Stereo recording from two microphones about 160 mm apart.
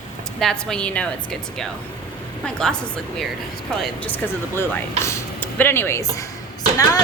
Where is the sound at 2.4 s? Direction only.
5° left (ahead or behind).